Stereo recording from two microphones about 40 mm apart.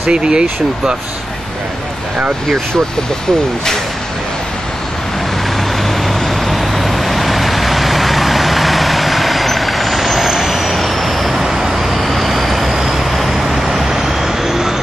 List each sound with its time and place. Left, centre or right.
0.1 s speech: right
5.9 s vehicle: centre